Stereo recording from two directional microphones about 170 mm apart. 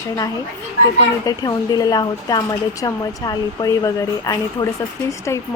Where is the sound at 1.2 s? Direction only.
20° left (ahead or behind).